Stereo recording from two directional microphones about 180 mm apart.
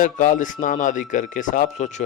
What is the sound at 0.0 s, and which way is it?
Speech, 45° left (ahead or behind).